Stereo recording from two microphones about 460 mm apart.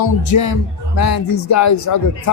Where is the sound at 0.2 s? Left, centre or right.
Left.